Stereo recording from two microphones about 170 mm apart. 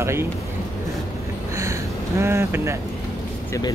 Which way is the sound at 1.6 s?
15° right (ahead or behind).